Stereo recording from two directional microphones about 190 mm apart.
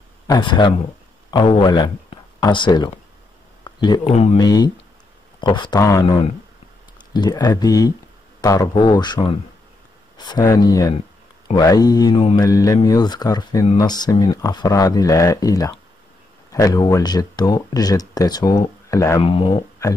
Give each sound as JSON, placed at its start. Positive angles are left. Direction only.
{"t": 0.3, "sound": "speech", "side_deg": 25}
{"t": 3.6, "sound": "a sound", "side_deg": 25}
{"t": 4.1, "sound": "speech", "side_deg": 35}
{"t": 4.4, "sound": "speech", "side_deg": 20}